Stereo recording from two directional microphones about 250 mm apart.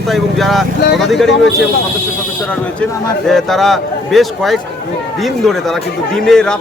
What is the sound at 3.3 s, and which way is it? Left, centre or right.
Speech, centre.